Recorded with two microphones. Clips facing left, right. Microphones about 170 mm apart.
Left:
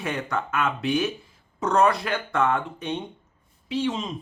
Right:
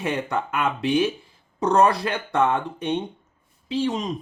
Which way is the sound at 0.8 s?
30° right (ahead or behind).